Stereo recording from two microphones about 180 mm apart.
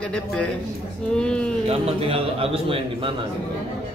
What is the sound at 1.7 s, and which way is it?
A man's voice, 35° right (ahead or behind).